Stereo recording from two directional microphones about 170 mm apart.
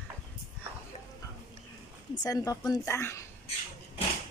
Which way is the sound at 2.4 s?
20° left (ahead or behind).